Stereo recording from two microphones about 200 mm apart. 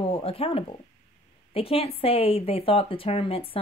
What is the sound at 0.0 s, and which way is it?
A woman's voice, 30° left (ahead or behind).